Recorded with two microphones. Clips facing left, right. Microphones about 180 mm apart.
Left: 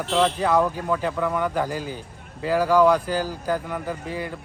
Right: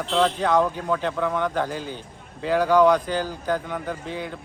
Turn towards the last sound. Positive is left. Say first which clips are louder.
# left 1 dB
turn(degrees=5)  # may be behind; listen again after turning